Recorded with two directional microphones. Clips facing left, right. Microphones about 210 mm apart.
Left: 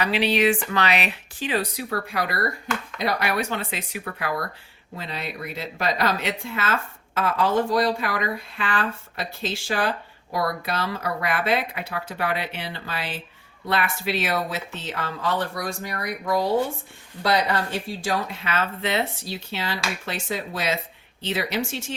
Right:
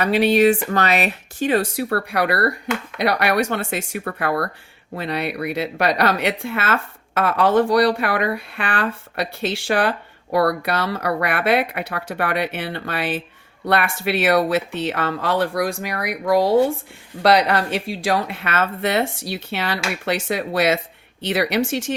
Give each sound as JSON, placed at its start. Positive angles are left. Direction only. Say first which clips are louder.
{"t": 0.0, "sound": "speech", "louder": "right 6 dB", "side_deg": -45}
{"t": 3.6, "sound": "speech", "louder": "right 6 dB", "side_deg": -50}
{"t": 13.7, "sound": "speech", "louder": "right 5 dB", "side_deg": -65}
{"t": 18.9, "sound": "speech", "louder": "right 5 dB", "side_deg": -75}